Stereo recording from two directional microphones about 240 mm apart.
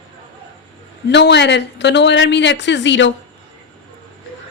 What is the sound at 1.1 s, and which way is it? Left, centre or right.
A woman's voice, left.